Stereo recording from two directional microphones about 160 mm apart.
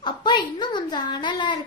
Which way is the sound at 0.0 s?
30° left (ahead or behind).